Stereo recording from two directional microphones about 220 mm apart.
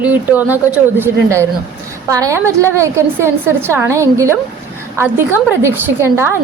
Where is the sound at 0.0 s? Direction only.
5° right (ahead or behind).